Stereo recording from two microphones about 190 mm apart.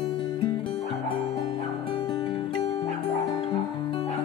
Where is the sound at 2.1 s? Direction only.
20° left (ahead or behind).